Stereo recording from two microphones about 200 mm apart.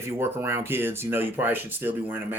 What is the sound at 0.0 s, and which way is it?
Speech, 10° right (ahead or behind).